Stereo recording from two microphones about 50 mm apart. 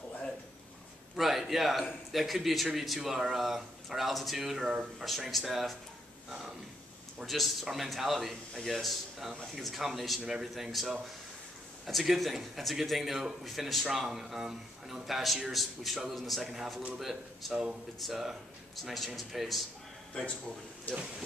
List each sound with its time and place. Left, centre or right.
1.1 s speech: centre
5.0 s speech: centre
7.2 s speech: centre